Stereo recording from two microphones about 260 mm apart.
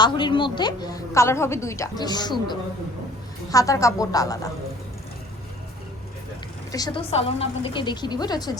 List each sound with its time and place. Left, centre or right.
0.0 s a woman's voice: centre
6.7 s a woman's voice: centre